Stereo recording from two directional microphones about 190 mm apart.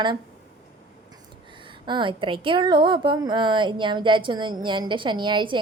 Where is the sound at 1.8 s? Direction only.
25° right (ahead or behind).